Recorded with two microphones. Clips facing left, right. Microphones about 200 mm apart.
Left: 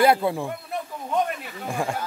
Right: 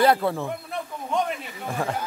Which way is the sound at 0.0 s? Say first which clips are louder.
Left 1 dB; 10° left (ahead or behind).